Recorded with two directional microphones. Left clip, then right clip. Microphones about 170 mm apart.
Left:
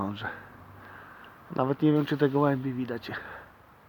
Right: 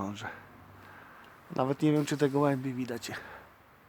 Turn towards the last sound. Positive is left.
turn(degrees=-10)  # may be behind; listen again after turning